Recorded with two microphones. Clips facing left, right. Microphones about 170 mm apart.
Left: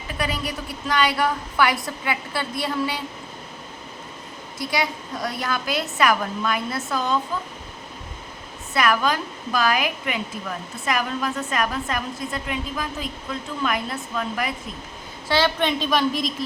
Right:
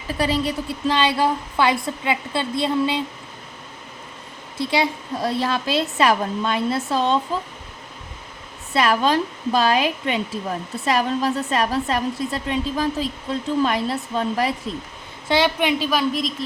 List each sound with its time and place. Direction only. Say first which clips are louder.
0.1 s a woman's voice: right 6 dB; 30° right (ahead or behind)
4.5 s a woman's voice: right 4 dB; 25° right (ahead or behind)
8.7 s a woman's voice: right 3 dB; 30° right (ahead or behind)
15.3 s a woman's voice: right 2 dB; 15° right (ahead or behind); by 16.3 s centre (ahead or behind)